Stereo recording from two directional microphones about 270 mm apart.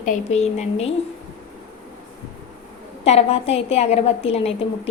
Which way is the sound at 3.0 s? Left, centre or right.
Left.